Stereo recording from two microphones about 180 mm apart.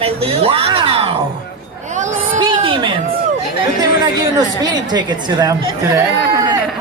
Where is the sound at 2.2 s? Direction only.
30° right (ahead or behind).